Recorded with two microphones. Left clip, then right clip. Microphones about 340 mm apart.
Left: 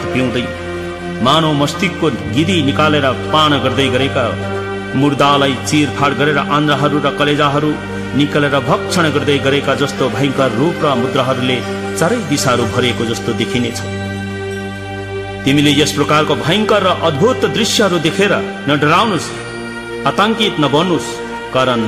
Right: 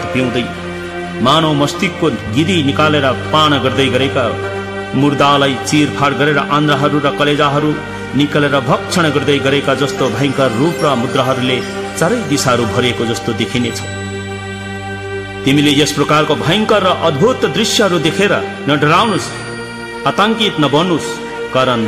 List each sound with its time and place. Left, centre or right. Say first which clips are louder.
0.1 s a man's voice: even; left
15.4 s a man's voice: right 1 dB; left